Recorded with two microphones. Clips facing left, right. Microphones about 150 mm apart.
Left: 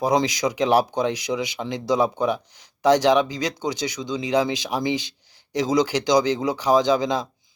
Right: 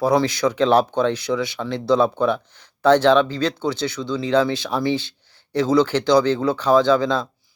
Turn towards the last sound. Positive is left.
turn(degrees=15)  # may be behind; listen again after turning